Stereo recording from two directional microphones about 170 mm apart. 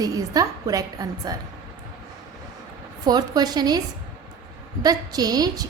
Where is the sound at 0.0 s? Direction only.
20° right (ahead or behind).